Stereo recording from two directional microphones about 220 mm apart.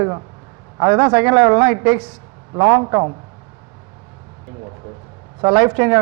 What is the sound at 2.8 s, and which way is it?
Speech, 20° right (ahead or behind).